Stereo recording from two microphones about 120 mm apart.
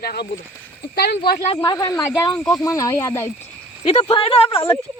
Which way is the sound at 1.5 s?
35° left (ahead or behind).